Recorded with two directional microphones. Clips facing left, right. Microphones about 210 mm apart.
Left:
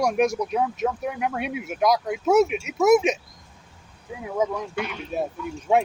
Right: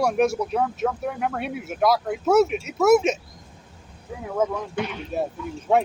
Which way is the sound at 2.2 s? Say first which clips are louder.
Even; 15° left (ahead or behind).